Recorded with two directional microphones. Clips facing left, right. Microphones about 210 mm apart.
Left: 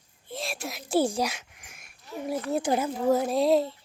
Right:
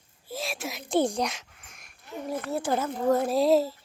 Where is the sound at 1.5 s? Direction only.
10° left (ahead or behind).